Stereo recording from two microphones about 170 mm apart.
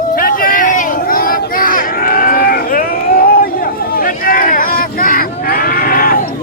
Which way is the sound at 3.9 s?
55° left (ahead or behind).